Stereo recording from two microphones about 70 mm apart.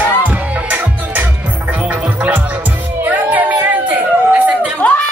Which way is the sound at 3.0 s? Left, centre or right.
Right.